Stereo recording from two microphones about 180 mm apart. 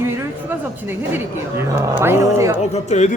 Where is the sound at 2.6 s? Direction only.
40° left (ahead or behind).